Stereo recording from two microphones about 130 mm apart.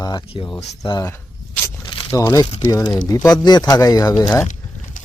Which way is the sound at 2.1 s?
25° left (ahead or behind).